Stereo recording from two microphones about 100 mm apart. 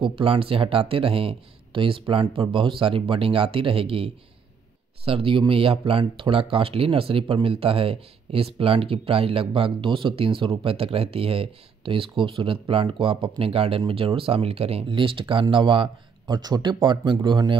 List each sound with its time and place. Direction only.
0.0 s speech: 65° right (ahead or behind); by 14.9 s 90° right
14.9 s speech: 55° right (ahead or behind)